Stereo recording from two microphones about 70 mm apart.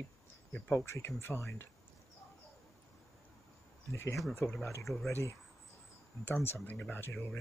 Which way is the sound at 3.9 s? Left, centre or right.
Left.